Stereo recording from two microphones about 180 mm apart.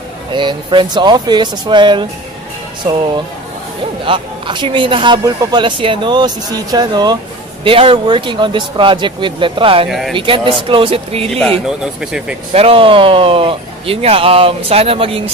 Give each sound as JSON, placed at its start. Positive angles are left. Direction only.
{"t": 0.3, "sound": "a man's voice", "side_deg": -25}
{"t": 4.0, "sound": "a man's voice", "side_deg": -30}
{"t": 9.8, "sound": "speech", "side_deg": 0}
{"t": 10.1, "sound": "a man's voice", "side_deg": -30}
{"t": 11.6, "sound": "speech", "side_deg": -5}
{"t": 12.5, "sound": "speech", "side_deg": -30}